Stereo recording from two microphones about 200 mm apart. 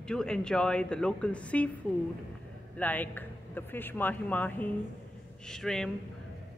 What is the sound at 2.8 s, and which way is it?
Speech, 10° left (ahead or behind).